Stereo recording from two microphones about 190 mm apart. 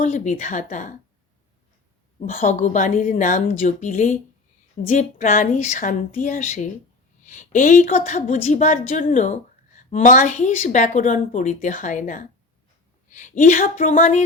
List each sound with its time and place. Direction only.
0.0 s a woman's voice: 40° left (ahead or behind)
2.2 s a woman's voice: 45° left (ahead or behind)